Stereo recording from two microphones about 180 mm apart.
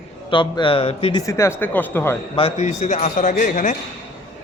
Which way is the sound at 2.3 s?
35° left (ahead or behind).